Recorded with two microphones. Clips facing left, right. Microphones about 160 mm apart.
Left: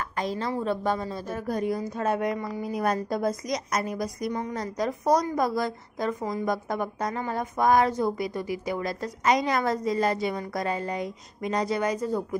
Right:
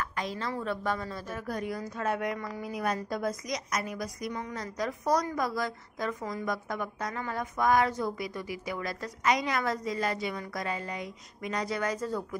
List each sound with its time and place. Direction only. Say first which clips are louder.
0.0 s a sound: left 5 dB; 35° left (ahead or behind)
0.5 s a woman's voice: left 5 dB; 30° left (ahead or behind)
2.8 s a woman's voice: left 5 dB; 40° left (ahead or behind); by 12.4 s 20° left (ahead or behind)